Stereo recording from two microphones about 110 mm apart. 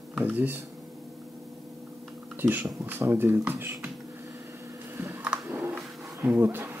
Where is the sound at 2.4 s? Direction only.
15° right (ahead or behind).